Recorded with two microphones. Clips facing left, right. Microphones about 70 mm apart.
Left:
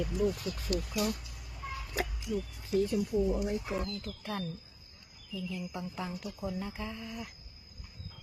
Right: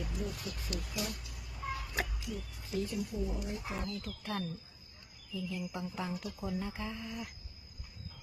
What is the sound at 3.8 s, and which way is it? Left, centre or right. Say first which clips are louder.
Speech: left 2 dB; centre.